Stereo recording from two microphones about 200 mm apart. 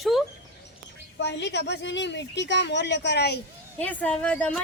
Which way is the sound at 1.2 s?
60° left (ahead or behind).